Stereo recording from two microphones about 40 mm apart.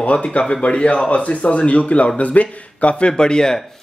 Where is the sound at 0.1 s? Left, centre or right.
Left.